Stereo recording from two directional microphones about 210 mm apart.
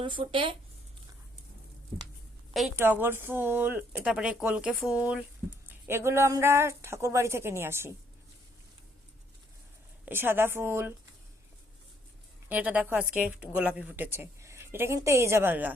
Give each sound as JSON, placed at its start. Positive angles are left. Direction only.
{"t": 0.0, "sound": "speech", "side_deg": -25}
{"t": 2.5, "sound": "speech", "side_deg": -5}
{"t": 10.1, "sound": "speech", "side_deg": -10}
{"t": 12.5, "sound": "speech", "side_deg": -5}